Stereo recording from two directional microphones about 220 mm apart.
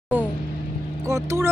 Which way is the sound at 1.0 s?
15° right (ahead or behind).